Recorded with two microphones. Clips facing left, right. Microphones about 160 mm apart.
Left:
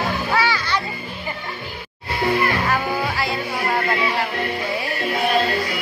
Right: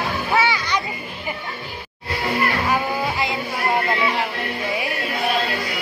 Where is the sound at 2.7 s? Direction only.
20° right (ahead or behind).